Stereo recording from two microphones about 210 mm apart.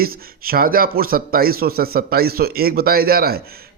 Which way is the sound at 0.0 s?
45° right (ahead or behind).